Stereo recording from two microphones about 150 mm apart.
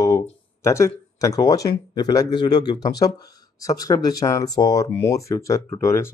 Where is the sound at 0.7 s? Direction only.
20° left (ahead or behind).